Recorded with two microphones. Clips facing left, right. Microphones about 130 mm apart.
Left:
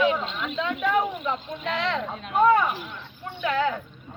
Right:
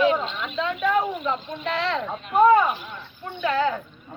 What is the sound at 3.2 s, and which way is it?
Speech, centre (ahead or behind).